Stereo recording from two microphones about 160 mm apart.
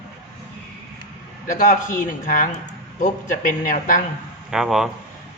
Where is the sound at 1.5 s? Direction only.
55° left (ahead or behind).